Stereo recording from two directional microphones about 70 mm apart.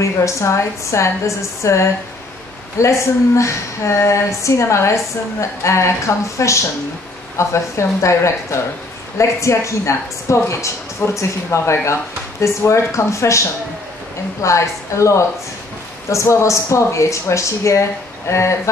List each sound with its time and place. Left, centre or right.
0.0 s speech: left
14.4 s speech: left